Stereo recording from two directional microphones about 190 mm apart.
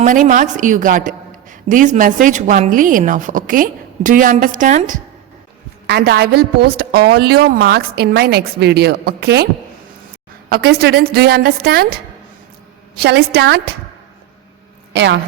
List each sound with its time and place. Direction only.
0.3 s a woman's voice: 40° right (ahead or behind)
5.9 s a woman's voice: 60° right (ahead or behind)
10.5 s a woman's voice: 55° right (ahead or behind)
13.0 s a woman's voice: 55° right (ahead or behind)
14.9 s a woman's voice: 65° right (ahead or behind)